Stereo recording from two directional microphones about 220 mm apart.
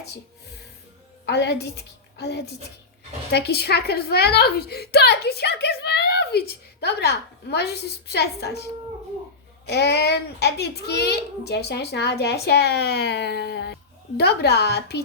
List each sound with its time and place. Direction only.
1.2 s a woman's voice: 50° left (ahead or behind)
9.6 s a woman's voice: 50° left (ahead or behind)